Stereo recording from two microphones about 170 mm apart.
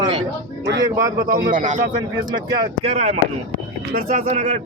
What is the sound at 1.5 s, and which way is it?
Speech, 50° right (ahead or behind).